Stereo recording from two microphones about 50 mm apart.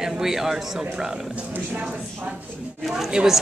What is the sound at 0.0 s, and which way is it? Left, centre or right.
Speech, centre.